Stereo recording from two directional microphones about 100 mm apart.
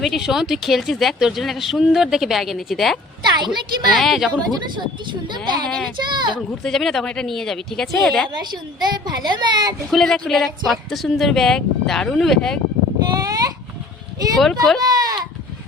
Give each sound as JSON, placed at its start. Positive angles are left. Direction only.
{"t": 0.0, "sound": "speech", "side_deg": -5}
{"t": 3.3, "sound": "a child's voice", "side_deg": -45}
{"t": 3.9, "sound": "speech", "side_deg": 0}
{"t": 4.5, "sound": "a child's voice", "side_deg": -50}
{"t": 5.6, "sound": "speech", "side_deg": 5}
{"t": 6.0, "sound": "a child's voice", "side_deg": -50}
{"t": 6.6, "sound": "speech", "side_deg": 5}
{"t": 8.4, "sound": "a child's voice", "side_deg": -45}
{"t": 9.9, "sound": "speech", "side_deg": 0}
{"t": 13.1, "sound": "a sound", "side_deg": -40}
{"t": 14.3, "sound": "speech", "side_deg": 0}
{"t": 14.8, "sound": "a sound", "side_deg": -40}